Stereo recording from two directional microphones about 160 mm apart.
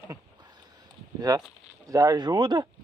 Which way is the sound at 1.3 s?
25° right (ahead or behind).